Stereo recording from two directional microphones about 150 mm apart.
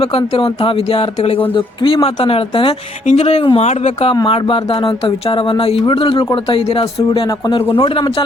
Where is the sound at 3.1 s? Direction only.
45° left (ahead or behind).